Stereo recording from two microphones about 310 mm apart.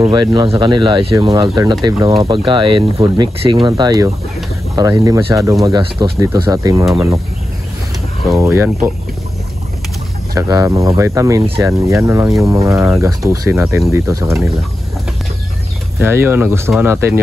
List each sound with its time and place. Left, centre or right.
0.0 s speech: centre
8.2 s speech: centre
10.3 s speech: centre
16.0 s speech: centre